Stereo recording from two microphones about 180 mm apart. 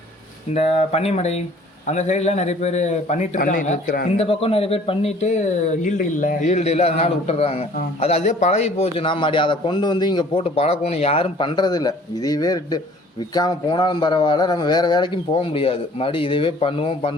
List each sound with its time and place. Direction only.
0.5 s a man's voice: 35° left (ahead or behind)
4.2 s a man's voice: 30° left (ahead or behind)